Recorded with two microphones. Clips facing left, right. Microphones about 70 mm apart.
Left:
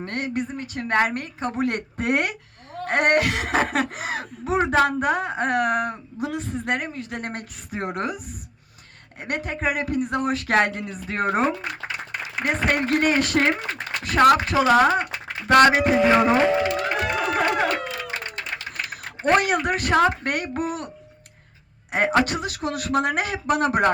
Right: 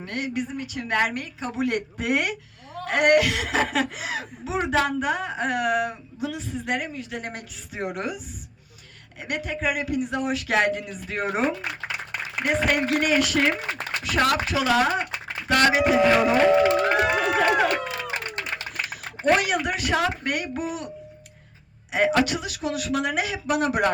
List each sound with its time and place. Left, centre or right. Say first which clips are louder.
0.0 s a woman's voice: left 2 dB; left
9.2 s a woman's voice: left 1 dB; left
16.6 s music: right 4 dB; right
17.3 s music: right 1 dB; left
18.9 s speech: left 1 dB; left
21.9 s a woman's voice: left 1 dB; left